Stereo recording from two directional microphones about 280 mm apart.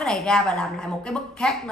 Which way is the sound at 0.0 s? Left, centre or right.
Centre.